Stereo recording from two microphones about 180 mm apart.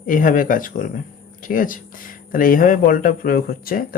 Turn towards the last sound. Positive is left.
turn(degrees=55)  # may be behind; listen again after turning